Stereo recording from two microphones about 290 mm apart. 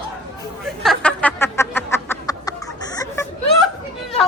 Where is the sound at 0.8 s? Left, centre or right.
Centre.